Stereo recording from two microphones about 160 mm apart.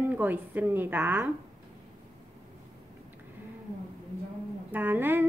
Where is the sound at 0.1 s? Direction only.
10° right (ahead or behind).